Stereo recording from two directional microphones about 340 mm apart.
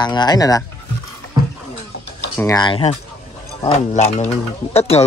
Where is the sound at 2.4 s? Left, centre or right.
Centre.